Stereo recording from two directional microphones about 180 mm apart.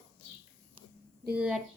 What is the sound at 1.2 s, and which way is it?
Speech, 5° right (ahead or behind).